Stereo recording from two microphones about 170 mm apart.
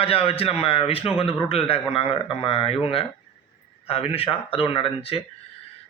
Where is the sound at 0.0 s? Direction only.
35° left (ahead or behind).